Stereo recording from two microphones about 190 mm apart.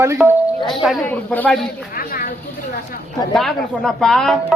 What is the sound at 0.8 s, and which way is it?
Speech, 5° left (ahead or behind).